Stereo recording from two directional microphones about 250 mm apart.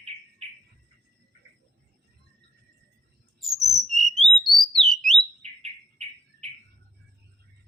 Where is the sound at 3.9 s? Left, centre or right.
Centre.